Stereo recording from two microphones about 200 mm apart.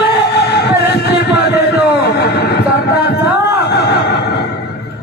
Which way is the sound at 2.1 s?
55° left (ahead or behind).